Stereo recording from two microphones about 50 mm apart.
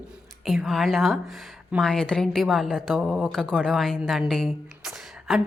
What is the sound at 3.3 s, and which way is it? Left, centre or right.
Speech, centre.